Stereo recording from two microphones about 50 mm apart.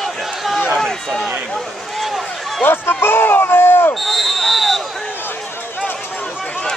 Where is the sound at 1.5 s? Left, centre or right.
Centre.